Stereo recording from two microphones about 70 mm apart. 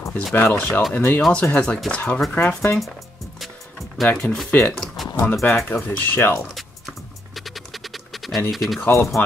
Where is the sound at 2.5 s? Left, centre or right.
Left.